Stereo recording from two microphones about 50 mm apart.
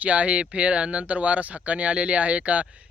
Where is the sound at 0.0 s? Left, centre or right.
Right.